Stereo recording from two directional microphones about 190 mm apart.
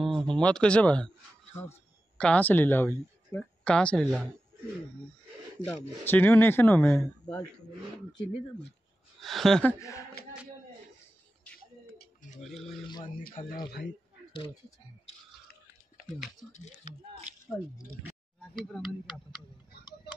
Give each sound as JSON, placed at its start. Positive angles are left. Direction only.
{"t": 0.3, "sound": "speech", "side_deg": 5}
{"t": 5.7, "sound": "speech", "side_deg": 10}
{"t": 9.2, "sound": "speech", "side_deg": 0}
{"t": 12.4, "sound": "speech", "side_deg": 0}
{"t": 12.8, "sound": "speech", "side_deg": 25}
{"t": 13.2, "sound": "speech", "side_deg": 50}
{"t": 14.3, "sound": "speech", "side_deg": 25}
{"t": 16.2, "sound": "speech", "side_deg": 40}
{"t": 17.5, "sound": "speech", "side_deg": 0}